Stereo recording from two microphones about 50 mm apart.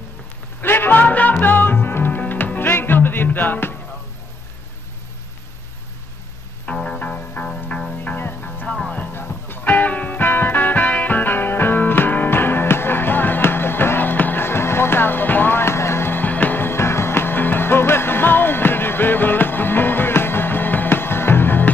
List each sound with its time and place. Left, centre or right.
0.6 s a sound: left
1.4 s music: left
6.6 s music: centre
7.0 s music: left
8.7 s music: left
9.1 s music: left
16.1 s music: left